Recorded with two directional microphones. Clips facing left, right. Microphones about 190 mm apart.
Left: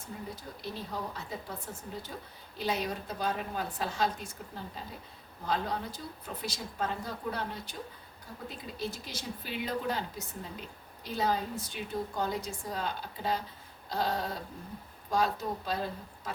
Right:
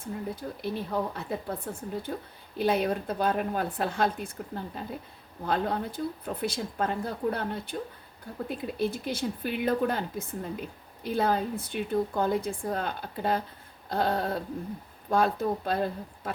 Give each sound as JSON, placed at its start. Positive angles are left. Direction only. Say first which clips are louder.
{"t": 0.0, "sound": "speech", "louder": "right 7 dB", "side_deg": -55}